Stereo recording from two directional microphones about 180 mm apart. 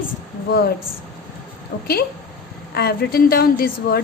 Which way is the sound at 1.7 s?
60° left (ahead or behind).